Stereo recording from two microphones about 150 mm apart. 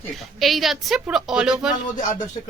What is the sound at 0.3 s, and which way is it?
A woman's voice, centre (ahead or behind).